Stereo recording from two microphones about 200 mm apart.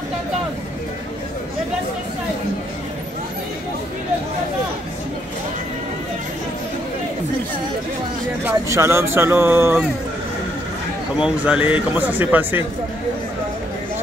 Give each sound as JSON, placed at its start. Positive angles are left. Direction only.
{"t": 8.5, "sound": "speech", "side_deg": -15}
{"t": 11.1, "sound": "speech", "side_deg": -5}